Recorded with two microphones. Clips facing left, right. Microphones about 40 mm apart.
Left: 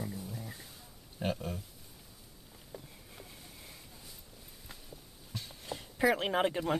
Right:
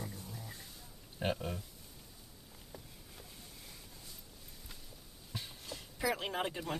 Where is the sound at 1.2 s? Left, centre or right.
Centre.